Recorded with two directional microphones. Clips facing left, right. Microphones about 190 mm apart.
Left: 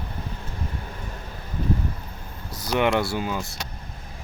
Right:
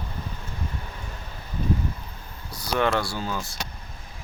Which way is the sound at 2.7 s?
15° left (ahead or behind).